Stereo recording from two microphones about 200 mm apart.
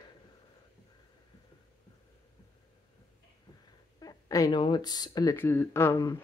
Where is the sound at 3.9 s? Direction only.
15° left (ahead or behind).